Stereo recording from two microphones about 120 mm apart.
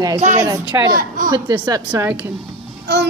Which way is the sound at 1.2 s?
35° right (ahead or behind).